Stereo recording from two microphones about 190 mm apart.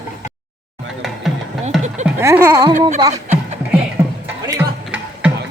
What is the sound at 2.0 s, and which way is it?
Speech, 15° right (ahead or behind).